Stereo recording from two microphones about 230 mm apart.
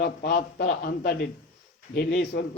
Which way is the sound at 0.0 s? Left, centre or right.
Left.